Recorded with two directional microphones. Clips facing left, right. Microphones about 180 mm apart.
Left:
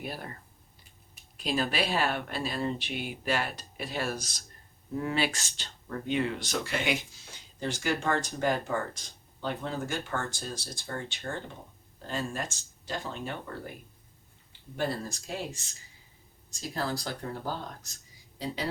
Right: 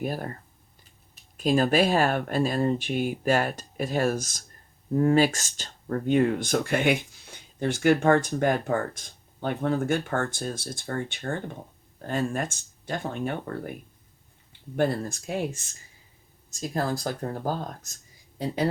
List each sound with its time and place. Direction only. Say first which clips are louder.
0.0 s speech: right 8 dB; 45° right (ahead or behind)
1.4 s speech: right 8 dB; 45° right (ahead or behind)
14.8 s speech: right 7 dB; 55° right (ahead or behind)